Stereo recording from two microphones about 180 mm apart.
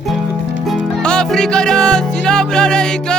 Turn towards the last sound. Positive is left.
turn(degrees=5)  # may be behind; listen again after turning